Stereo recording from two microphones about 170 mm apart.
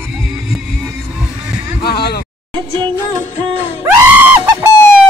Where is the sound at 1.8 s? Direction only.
70° left (ahead or behind).